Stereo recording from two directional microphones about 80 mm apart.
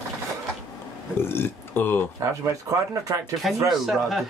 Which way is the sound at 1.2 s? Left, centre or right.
Left.